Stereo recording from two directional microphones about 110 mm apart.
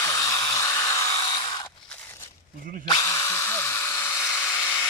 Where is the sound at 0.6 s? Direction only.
30° left (ahead or behind).